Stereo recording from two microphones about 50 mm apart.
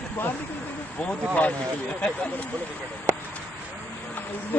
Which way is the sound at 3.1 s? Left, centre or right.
Right.